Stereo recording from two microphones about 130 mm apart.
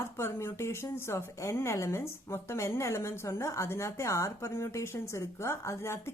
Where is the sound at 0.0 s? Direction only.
20° left (ahead or behind).